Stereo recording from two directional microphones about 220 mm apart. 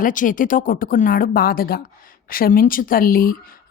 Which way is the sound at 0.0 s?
35° left (ahead or behind).